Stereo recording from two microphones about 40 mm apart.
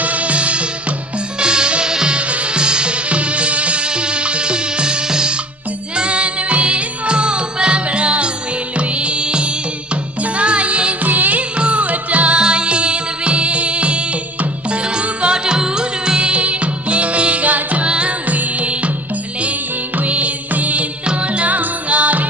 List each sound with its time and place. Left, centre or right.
0.0 s music: right
11.0 s music: right
11.5 s music: right
12.4 s music: right
17.8 s music: right
18.3 s music: right
20.0 s music: right